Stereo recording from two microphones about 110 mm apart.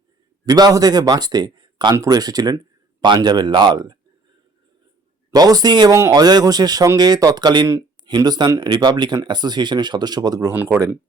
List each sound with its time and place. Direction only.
0.4 s speech: 35° right (ahead or behind)
5.3 s speech: 35° right (ahead or behind)
5.9 s speech: 25° right (ahead or behind)
6.1 s speech: 40° right (ahead or behind)
10.5 s speech: 20° right (ahead or behind)